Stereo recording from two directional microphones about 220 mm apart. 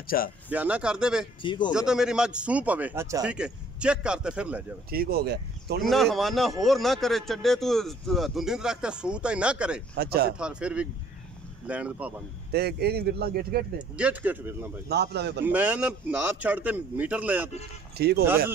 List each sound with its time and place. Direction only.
0.0 s speech: 40° left (ahead or behind)
0.5 s speech: 5° right (ahead or behind)
1.4 s speech: 20° left (ahead or behind)
1.7 s speech: 5° right (ahead or behind)
4.9 s speech: 45° right (ahead or behind)
5.8 s speech: centre (ahead or behind)
9.9 s speech: 45° right (ahead or behind)
10.4 s speech: 5° right (ahead or behind)
12.5 s speech: 45° right (ahead or behind)
13.9 s a man's voice: 5° right (ahead or behind)
14.9 s speech: 50° right (ahead or behind)
15.4 s a man's voice: 5° right (ahead or behind)
17.9 s speech: 45° right (ahead or behind)